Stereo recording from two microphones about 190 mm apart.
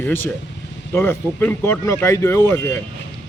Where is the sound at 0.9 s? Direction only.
10° left (ahead or behind).